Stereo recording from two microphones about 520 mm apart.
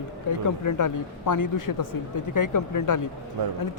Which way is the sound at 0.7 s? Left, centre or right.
Left.